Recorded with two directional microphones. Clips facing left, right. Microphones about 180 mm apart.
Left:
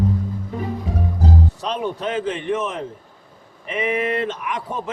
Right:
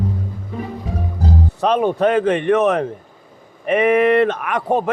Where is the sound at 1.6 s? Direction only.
55° right (ahead or behind).